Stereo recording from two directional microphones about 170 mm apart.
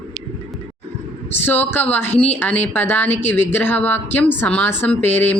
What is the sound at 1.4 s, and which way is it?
A woman's voice, 10° left (ahead or behind).